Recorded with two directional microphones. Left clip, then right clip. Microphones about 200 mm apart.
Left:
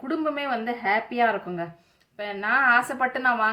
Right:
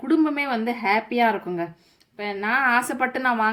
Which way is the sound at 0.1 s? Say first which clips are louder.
Right 5 dB; 15° right (ahead or behind).